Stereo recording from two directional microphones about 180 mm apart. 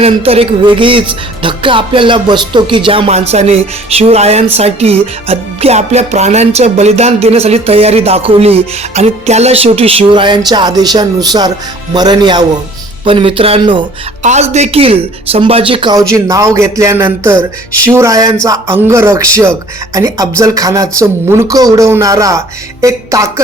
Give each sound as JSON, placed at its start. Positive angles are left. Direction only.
{"t": 0.0, "sound": "music", "side_deg": -35}
{"t": 14.2, "sound": "music", "side_deg": -40}
{"t": 17.8, "sound": "speech", "side_deg": -15}